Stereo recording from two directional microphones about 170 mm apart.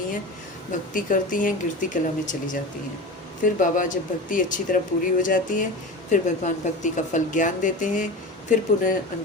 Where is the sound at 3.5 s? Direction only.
50° left (ahead or behind).